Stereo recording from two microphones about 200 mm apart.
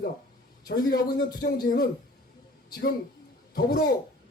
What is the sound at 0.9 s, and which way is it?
A man's voice, 50° left (ahead or behind).